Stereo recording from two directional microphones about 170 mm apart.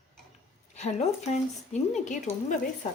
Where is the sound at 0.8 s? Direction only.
40° left (ahead or behind).